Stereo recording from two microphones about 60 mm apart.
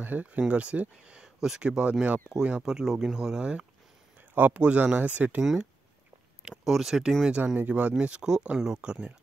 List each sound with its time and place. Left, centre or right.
0.0 s speech: right
4.4 s speech: right
5.4 s speech: centre; by 7.9 s right
8.0 s speech: centre